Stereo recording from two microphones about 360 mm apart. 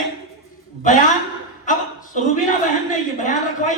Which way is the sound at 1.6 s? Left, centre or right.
Left.